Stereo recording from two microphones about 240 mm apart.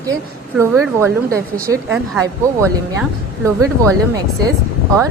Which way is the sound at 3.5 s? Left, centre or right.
Centre.